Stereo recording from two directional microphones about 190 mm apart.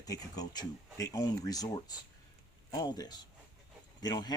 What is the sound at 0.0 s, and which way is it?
A man's voice, 20° left (ahead or behind).